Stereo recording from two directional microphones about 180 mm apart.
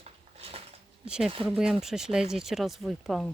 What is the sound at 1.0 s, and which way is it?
Speech, 5° right (ahead or behind).